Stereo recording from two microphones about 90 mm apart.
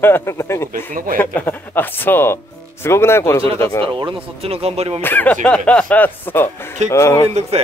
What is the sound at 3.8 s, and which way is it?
Speech, 70° right (ahead or behind).